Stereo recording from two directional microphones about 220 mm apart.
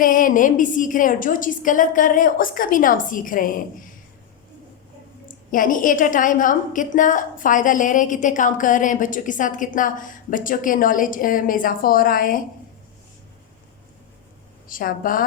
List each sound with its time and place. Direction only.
0.0 s a woman's voice: 40° left (ahead or behind)
5.5 s a woman's voice: 40° left (ahead or behind)
14.7 s a woman's voice: 40° left (ahead or behind)